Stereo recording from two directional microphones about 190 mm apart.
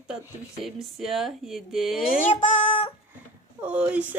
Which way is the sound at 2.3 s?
30° left (ahead or behind).